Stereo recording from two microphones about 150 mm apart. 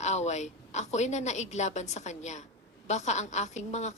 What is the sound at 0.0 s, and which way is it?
A woman's voice, 50° left (ahead or behind).